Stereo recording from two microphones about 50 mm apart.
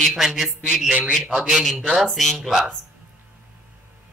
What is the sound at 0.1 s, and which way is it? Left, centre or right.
A man's voice, centre.